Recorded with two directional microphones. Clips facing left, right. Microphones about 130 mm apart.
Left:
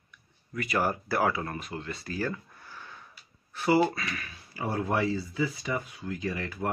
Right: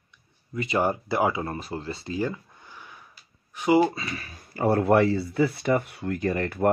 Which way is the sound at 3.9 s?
30° right (ahead or behind).